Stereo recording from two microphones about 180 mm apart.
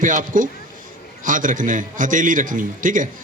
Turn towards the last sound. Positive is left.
turn(degrees=-45)  # may be behind; listen again after turning